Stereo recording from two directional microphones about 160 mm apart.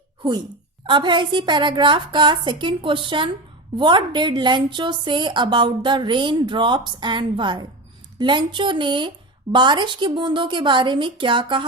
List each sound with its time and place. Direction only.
0.2 s a woman's voice: 25° right (ahead or behind)